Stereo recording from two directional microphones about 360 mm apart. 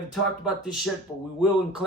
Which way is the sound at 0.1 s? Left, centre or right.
Centre.